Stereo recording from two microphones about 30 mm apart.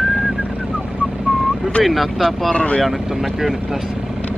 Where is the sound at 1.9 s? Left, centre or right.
Centre.